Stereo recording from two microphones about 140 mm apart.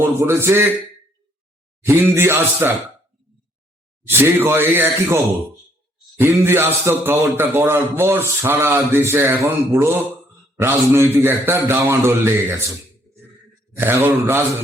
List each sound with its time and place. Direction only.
0.0 s a man's voice: 15° right (ahead or behind)
1.9 s a man's voice: 15° right (ahead or behind)
4.0 s a man's voice: 15° right (ahead or behind)
13.7 s a man's voice: 15° right (ahead or behind)